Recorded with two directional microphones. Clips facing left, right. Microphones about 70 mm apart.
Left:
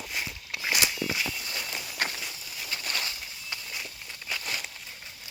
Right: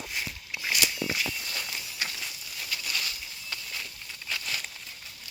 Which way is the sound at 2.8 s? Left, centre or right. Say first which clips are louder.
Left 2 dB; left.